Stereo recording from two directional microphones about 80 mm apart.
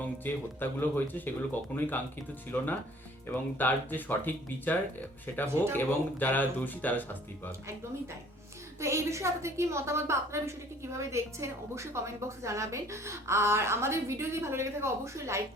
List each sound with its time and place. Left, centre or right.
0.0 s speech: left
8.8 s a woman's voice: right